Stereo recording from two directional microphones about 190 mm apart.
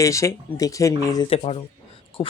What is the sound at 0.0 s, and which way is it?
Speech, 15° left (ahead or behind).